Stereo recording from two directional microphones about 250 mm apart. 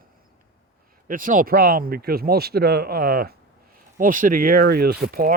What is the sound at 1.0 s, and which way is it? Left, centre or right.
Speech, right.